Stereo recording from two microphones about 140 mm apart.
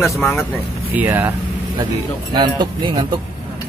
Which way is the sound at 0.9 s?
15° right (ahead or behind).